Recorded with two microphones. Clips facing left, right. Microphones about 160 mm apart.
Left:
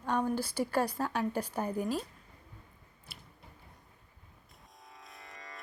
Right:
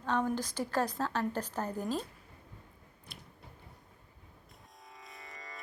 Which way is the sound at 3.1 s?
5° left (ahead or behind).